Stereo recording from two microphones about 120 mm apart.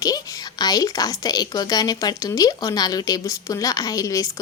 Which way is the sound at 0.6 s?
30° left (ahead or behind).